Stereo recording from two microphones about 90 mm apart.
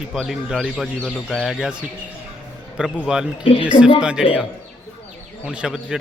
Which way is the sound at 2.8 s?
10° right (ahead or behind).